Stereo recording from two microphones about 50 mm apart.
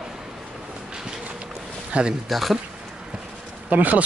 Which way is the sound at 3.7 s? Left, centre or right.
Right.